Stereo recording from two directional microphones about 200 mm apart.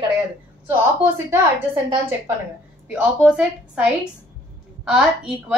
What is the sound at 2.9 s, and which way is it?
A woman's voice, 5° right (ahead or behind).